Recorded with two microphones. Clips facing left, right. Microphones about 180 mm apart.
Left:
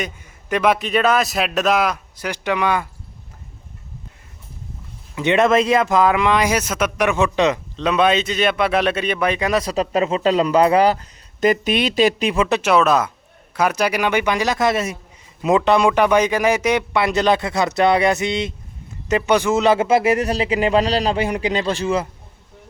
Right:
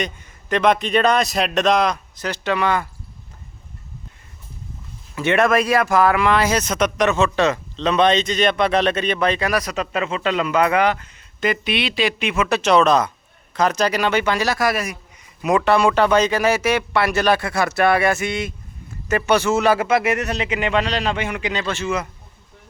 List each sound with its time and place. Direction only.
0.0 s a man's voice: 10° left (ahead or behind)
5.1 s speech: 20° left (ahead or behind)
9.5 s a man's voice: 30° left (ahead or behind)
12.6 s a man's voice: 5° left (ahead or behind); by 22.1 s 30° left (ahead or behind)